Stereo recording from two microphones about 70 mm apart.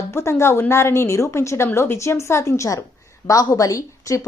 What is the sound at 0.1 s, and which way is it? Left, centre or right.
A woman's voice, left.